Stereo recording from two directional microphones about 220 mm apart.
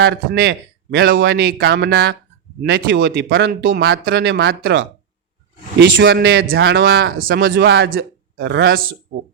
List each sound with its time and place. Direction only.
0.0 s speech: 45° right (ahead or behind)
5.8 s speech: 45° right (ahead or behind)